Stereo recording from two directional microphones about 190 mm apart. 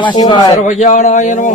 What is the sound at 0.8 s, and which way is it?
Speech, 40° left (ahead or behind).